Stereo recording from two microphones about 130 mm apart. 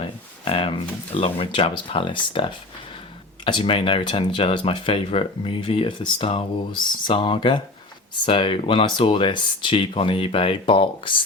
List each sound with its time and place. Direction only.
0.0 s speech: 45° left (ahead or behind)